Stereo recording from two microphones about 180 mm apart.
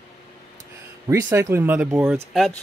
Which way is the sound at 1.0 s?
15° right (ahead or behind).